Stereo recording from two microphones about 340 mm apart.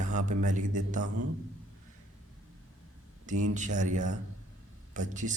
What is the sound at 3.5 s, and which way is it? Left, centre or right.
Speech, right.